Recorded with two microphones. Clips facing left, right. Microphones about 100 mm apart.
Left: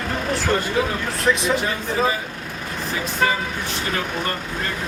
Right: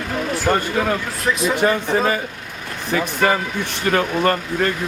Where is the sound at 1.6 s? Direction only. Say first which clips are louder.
Right 5 dB; 60° right (ahead or behind).